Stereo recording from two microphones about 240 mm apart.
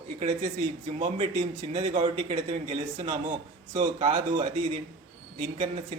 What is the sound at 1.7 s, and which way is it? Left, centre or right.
A man's voice, right.